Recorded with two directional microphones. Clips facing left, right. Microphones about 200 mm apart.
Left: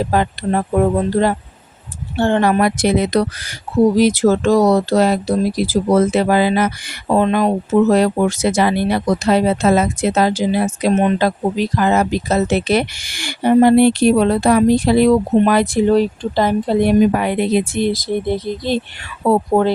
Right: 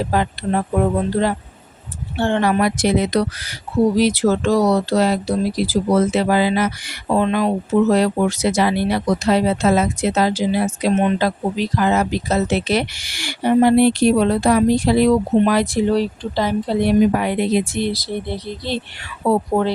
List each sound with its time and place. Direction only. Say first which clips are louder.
2.1 s speech: left 3 dB; 45° left (ahead or behind)